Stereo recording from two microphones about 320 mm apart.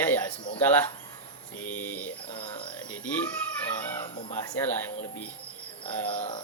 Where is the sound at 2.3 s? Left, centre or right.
Centre.